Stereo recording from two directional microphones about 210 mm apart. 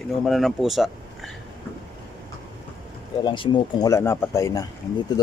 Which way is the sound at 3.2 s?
25° left (ahead or behind).